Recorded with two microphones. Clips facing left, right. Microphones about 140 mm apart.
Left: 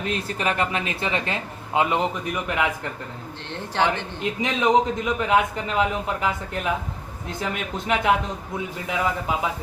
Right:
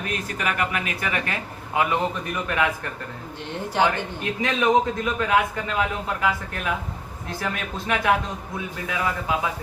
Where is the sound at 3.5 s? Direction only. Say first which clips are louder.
Right 1 dB; 15° right (ahead or behind).